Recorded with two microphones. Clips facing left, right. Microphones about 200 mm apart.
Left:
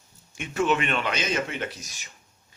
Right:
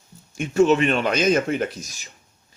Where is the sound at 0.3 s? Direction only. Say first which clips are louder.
Right 8 dB; 40° right (ahead or behind).